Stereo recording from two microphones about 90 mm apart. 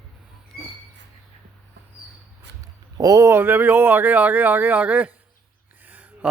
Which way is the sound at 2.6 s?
40° right (ahead or behind).